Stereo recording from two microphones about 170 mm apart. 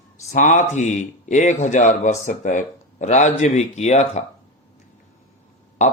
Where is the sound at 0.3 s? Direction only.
45° left (ahead or behind).